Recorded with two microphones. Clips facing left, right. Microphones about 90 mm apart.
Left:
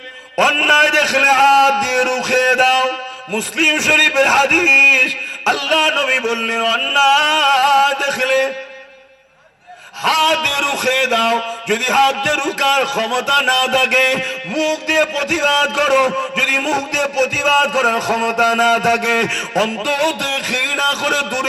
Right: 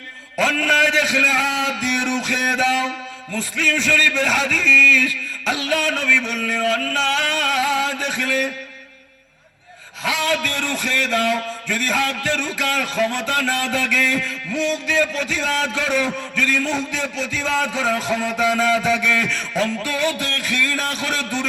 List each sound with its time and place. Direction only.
0.3 s speech: 80° left
10.0 s speech: 85° left